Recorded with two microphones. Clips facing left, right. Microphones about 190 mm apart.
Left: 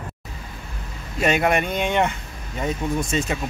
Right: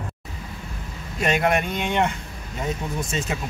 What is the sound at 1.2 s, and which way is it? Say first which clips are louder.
Speech: left 2 dB; centre (ahead or behind).